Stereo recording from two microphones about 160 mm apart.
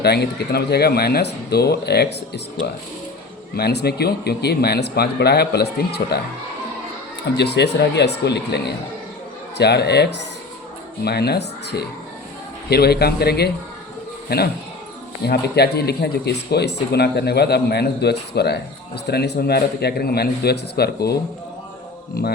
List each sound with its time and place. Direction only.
0.0 s speech: 90° left
3.5 s speech: 90° left
7.3 s a man's voice: 90° left
22.2 s speech: 75° left (ahead or behind)